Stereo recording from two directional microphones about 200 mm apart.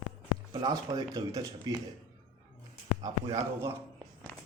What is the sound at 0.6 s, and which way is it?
Speech, 20° right (ahead or behind).